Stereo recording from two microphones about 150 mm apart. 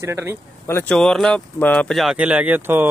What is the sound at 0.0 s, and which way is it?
Speech, 15° right (ahead or behind).